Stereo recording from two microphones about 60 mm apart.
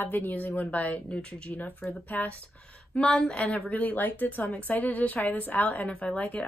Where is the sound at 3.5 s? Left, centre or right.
Left.